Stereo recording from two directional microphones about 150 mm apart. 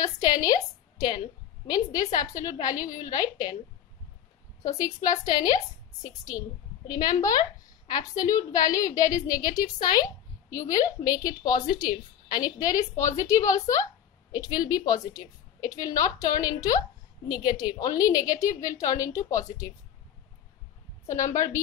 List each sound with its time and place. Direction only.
0.0 s a sound: 25° left (ahead or behind)
1.7 s a woman's voice: 25° left (ahead or behind)
4.6 s a woman's voice: 25° left (ahead or behind)
21.1 s a woman's voice: 20° left (ahead or behind)